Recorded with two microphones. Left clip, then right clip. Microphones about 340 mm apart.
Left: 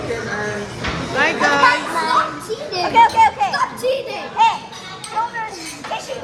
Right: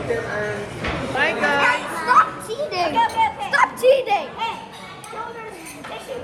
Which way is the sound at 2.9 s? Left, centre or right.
Left.